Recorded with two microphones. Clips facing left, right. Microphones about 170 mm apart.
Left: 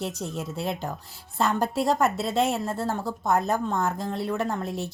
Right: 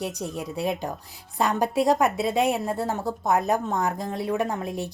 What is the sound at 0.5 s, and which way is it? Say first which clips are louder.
A woman's voice: right 5 dB; 15° right (ahead or behind).